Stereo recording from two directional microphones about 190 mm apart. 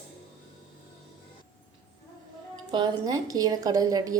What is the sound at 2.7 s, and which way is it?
A woman's voice, 25° right (ahead or behind).